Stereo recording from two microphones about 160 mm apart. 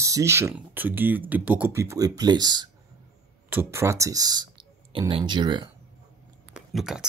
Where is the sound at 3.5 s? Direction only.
15° right (ahead or behind).